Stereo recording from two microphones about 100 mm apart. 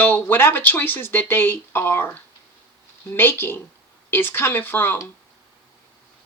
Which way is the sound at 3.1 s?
20° left (ahead or behind).